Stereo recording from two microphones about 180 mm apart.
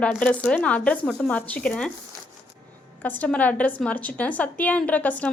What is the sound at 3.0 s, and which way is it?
A woman's voice, 10° left (ahead or behind).